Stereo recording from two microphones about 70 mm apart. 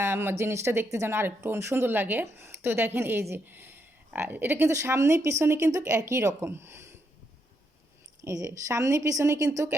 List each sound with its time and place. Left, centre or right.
0.0 s speech: right
4.7 s speech: right
8.2 s speech: right